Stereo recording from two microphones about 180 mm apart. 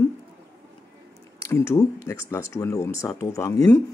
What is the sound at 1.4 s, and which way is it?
Speech, 15° left (ahead or behind).